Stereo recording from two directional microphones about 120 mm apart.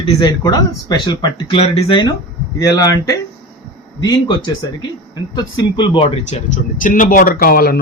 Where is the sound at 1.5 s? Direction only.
55° left (ahead or behind).